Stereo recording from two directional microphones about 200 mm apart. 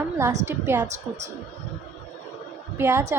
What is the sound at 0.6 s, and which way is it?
Speech, 10° right (ahead or behind).